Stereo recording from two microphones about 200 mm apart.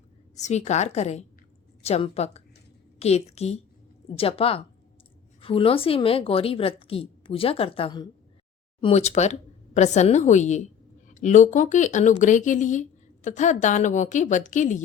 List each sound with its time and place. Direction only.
0.3 s a woman's voice: 35° left (ahead or behind)